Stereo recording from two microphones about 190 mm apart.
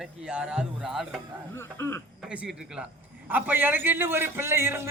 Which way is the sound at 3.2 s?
10° right (ahead or behind).